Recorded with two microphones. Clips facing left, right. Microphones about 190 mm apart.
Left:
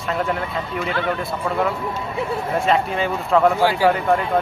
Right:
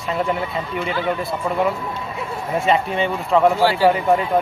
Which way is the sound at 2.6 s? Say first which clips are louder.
Right 2 dB; centre (ahead or behind).